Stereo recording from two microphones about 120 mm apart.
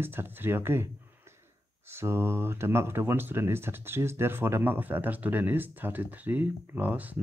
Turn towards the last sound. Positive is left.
turn(degrees=-15)  # may be behind; listen again after turning